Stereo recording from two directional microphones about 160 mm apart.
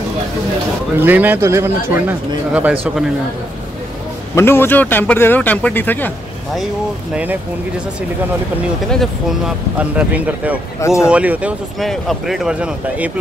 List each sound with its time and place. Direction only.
0.9 s speech: 10° right (ahead or behind)
4.4 s speech: 15° left (ahead or behind)
9.8 s speech: 10° right (ahead or behind)
10.8 s speech: 20° left (ahead or behind)
11.1 s speech: 10° right (ahead or behind)